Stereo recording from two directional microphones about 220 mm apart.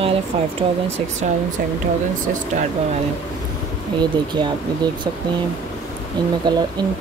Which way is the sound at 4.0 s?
20° right (ahead or behind).